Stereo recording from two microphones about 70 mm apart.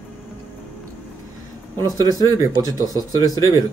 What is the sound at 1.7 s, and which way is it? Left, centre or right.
Speech, right.